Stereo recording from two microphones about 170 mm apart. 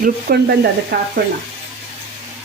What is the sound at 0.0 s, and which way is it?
Speech, 65° right (ahead or behind).